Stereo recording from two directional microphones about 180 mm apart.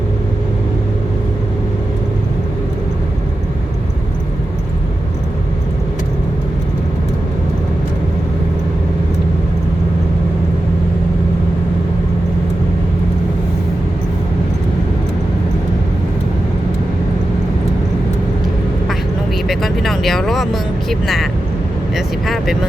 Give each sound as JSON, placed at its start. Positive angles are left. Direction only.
{"t": 19.5, "sound": "vehicle", "side_deg": 0}
{"t": 21.9, "sound": "vehicle", "side_deg": 0}